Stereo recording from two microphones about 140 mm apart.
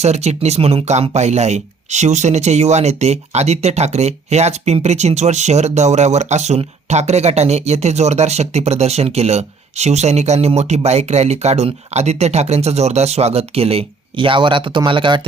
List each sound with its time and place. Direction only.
0.0 s speech: 50° right (ahead or behind); by 15.3 s 35° right (ahead or behind)